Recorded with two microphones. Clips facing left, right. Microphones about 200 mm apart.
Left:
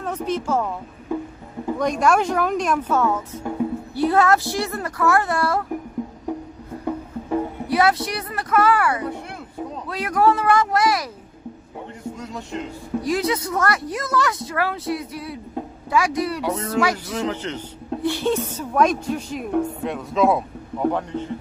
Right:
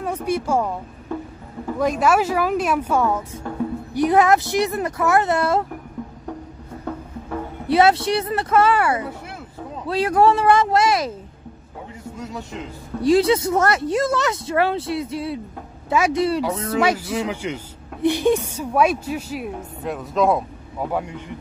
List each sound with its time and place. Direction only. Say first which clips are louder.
0.0 s speech: right 2 dB; 10° right (ahead or behind)
1.1 s music: left 3 dB; 15° left (ahead or behind)
1.8 s speech: right 1 dB; 5° right (ahead or behind); by 5.7 s 20° right (ahead or behind)
6.8 s music: left 4 dB; 15° left (ahead or behind)
7.6 s speech: right 6 dB; 25° right (ahead or behind)
12.2 s speech: right 1 dB; centre (ahead or behind)
13.0 s speech: right 8 dB; 30° right (ahead or behind)
16.4 s speech: right 1 dB; centre (ahead or behind)
20.9 s speech: left 1 dB; 10° right (ahead or behind)